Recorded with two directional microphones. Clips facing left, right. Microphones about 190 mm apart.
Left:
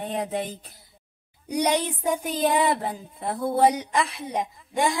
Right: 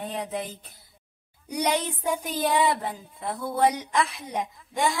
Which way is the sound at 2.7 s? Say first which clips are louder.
Left 2 dB; 35° left (ahead or behind).